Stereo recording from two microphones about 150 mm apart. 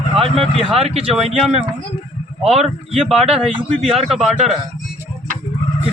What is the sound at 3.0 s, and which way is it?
A man's voice, centre (ahead or behind).